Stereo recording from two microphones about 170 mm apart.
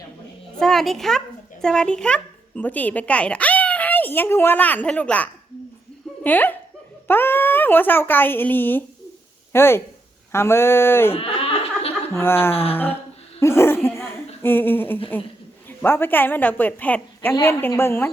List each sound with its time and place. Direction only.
0.6 s a child's voice: centre (ahead or behind)
11.1 s a sound: 35° left (ahead or behind)
12.1 s speech: 15° left (ahead or behind)
13.4 s laughter: 15° left (ahead or behind)
14.4 s speech: 10° left (ahead or behind)